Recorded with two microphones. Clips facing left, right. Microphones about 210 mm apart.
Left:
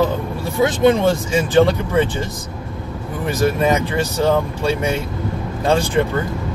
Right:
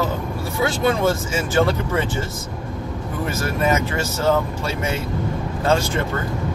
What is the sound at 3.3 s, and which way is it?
Speech, 15° left (ahead or behind).